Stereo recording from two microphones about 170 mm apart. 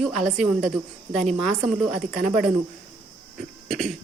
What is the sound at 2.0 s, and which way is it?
Speech, 50° right (ahead or behind).